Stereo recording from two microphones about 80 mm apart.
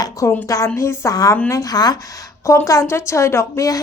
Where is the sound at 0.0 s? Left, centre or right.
Left.